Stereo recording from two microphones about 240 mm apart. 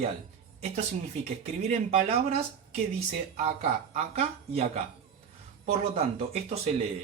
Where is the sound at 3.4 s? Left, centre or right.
Right.